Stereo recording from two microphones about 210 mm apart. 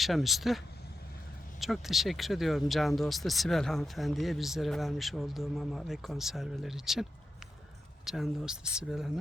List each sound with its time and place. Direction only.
0.0 s speech: centre (ahead or behind)